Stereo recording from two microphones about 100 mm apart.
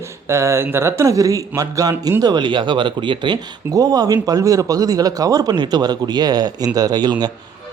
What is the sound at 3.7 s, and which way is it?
Speech, 35° right (ahead or behind).